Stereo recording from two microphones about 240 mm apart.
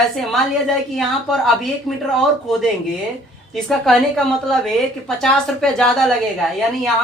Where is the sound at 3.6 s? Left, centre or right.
Centre.